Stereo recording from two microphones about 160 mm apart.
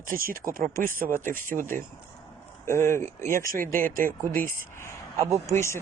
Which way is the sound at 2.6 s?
15° left (ahead or behind).